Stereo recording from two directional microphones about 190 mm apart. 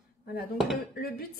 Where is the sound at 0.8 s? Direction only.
50° left (ahead or behind).